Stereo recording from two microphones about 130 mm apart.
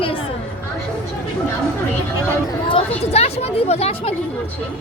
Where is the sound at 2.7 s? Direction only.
50° left (ahead or behind).